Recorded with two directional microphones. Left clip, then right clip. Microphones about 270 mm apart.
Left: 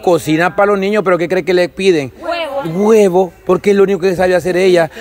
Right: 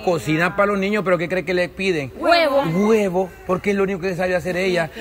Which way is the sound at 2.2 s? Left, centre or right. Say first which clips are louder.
Right 3 dB; right.